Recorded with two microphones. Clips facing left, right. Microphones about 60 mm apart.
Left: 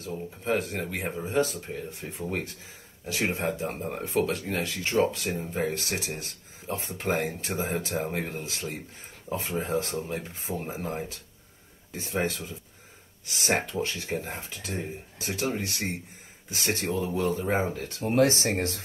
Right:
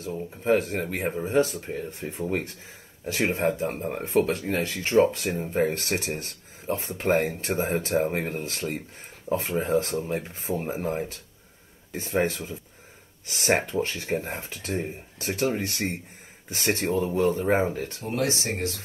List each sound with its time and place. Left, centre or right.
0.4 s speech: right
18.0 s speech: left